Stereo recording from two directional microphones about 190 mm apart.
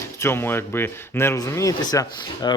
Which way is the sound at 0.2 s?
15° left (ahead or behind).